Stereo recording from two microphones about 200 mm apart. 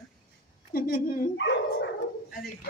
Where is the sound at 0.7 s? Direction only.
45° left (ahead or behind).